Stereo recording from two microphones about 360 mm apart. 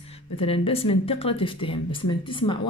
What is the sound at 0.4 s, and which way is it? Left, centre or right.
A woman's voice, centre.